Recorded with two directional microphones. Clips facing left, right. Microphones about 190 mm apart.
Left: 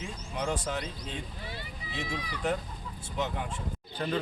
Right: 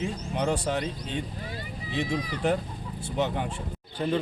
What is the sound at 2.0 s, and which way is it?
Speech, 40° right (ahead or behind).